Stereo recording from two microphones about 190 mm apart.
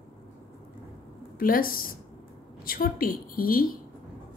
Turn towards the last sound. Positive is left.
turn(degrees=50)  # may be behind; listen again after turning